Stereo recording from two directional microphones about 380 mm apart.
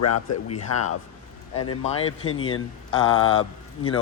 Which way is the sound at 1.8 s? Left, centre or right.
Centre.